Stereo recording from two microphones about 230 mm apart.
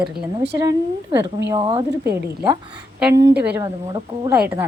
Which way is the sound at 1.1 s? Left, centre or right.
Right.